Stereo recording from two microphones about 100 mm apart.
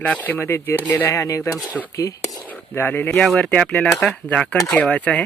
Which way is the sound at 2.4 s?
20° left (ahead or behind).